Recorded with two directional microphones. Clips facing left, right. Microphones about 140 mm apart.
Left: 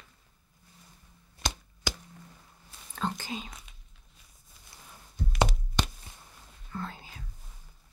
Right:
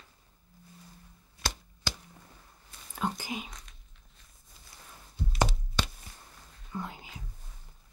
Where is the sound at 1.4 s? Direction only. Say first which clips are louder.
Left 1 dB; 20° left (ahead or behind).